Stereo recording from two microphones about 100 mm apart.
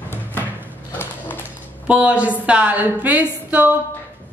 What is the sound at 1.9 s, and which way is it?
A woman's voice, 15° right (ahead or behind).